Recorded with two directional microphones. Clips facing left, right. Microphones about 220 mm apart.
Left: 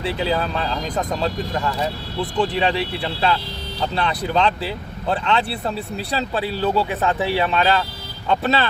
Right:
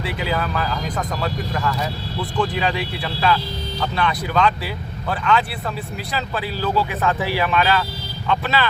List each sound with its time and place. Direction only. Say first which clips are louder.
0.0 s speech: left 2 dB; 30° left (ahead or behind)